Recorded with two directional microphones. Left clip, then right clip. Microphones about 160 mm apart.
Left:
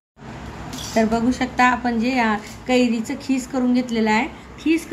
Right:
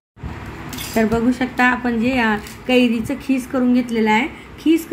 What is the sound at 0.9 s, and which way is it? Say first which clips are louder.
A woman's voice: right 1 dB; 15° right (ahead or behind).